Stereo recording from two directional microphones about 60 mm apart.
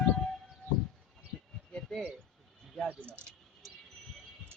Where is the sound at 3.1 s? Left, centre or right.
Right.